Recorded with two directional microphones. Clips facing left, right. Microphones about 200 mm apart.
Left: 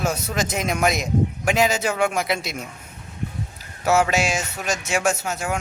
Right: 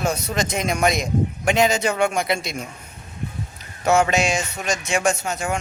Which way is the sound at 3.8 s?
5° left (ahead or behind).